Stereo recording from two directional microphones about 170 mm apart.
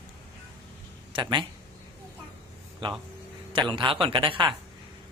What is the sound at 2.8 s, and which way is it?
Speech, 30° right (ahead or behind).